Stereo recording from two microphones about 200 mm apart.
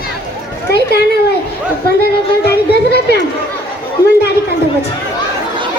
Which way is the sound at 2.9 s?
55° left (ahead or behind).